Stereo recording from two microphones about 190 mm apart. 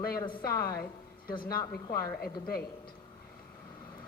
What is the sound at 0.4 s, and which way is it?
A woman's voice, 50° left (ahead or behind).